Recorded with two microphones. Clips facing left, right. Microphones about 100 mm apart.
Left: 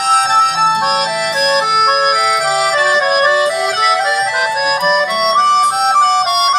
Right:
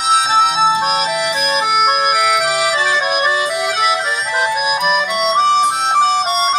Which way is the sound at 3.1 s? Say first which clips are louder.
Left 5 dB; 40° left (ahead or behind).